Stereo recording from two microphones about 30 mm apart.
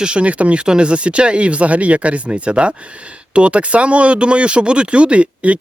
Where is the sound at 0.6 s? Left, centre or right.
Right.